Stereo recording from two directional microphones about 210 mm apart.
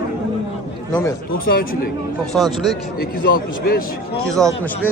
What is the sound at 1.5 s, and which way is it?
Speech, 45° left (ahead or behind).